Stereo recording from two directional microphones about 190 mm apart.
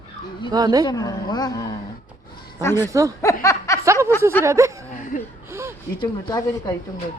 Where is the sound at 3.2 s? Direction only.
15° left (ahead or behind).